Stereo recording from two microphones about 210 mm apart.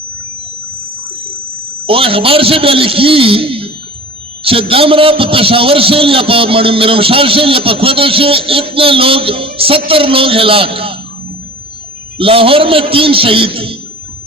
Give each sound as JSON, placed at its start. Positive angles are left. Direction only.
{"t": 1.9, "sound": "a man's voice", "side_deg": -25}
{"t": 12.1, "sound": "a man's voice", "side_deg": -25}